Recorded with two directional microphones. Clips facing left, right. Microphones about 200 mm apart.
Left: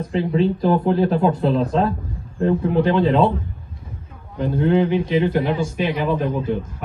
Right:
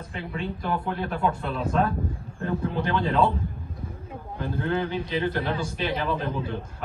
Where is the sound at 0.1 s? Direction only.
30° left (ahead or behind).